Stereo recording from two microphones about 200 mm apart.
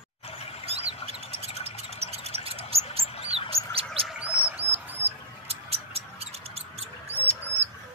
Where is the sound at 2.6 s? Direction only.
30° left (ahead or behind).